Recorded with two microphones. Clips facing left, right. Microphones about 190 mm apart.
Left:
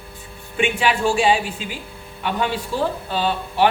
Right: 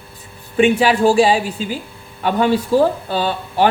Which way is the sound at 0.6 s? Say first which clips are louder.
Right 7 dB; 40° right (ahead or behind).